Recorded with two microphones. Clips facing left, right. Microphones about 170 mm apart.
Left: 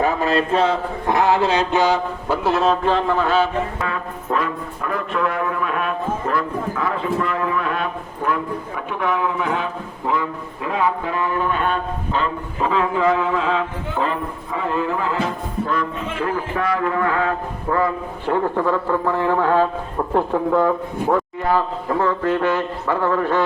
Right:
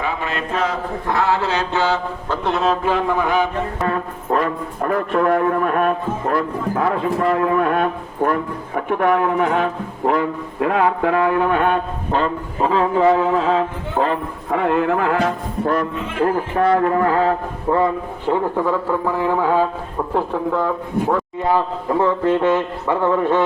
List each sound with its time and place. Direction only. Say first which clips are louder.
0.0 s a sound: left 5 dB; 40° left (ahead or behind)
1.2 s mantra: left 3 dB; 15° left (ahead or behind)
2.8 s speech: even; 10° right (ahead or behind)
4.8 s a sound: right 5 dB; 45° right (ahead or behind)
14.5 s speech: right 5 dB; 65° right (ahead or behind)
16.7 s mantra: right 2 dB; 35° right (ahead or behind)
17.7 s a man's voice: right 3 dB; 20° right (ahead or behind)
18.3 s speech: right 1 dB; 10° right (ahead or behind)
20.1 s speech: left 3 dB; centre (ahead or behind)
21.4 s a man's voice: right 1 dB; 20° right (ahead or behind)